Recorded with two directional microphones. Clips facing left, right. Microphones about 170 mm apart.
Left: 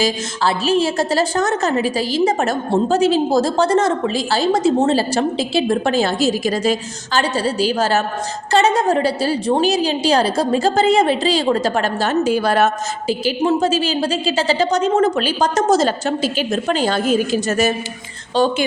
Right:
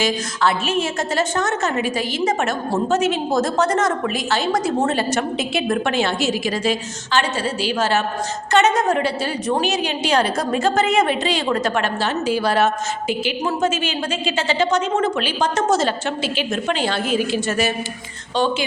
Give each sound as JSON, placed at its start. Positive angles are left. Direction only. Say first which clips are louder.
{"t": 0.0, "sound": "a woman's voice", "louder": "left 1 dB", "side_deg": 35}
{"t": 13.1, "sound": "a woman's voice", "louder": "left 6 dB", "side_deg": 30}